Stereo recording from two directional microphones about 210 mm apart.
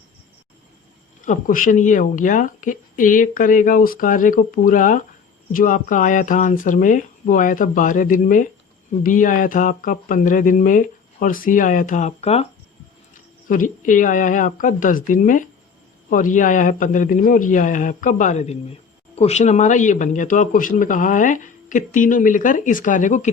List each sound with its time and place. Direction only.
1.2 s speech: 40° left (ahead or behind)
13.5 s speech: 40° left (ahead or behind)